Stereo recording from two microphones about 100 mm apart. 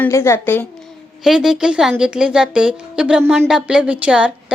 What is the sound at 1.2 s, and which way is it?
A woman's voice, 5° right (ahead or behind).